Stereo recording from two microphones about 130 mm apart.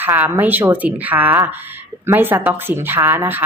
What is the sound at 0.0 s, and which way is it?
Speech, 15° right (ahead or behind).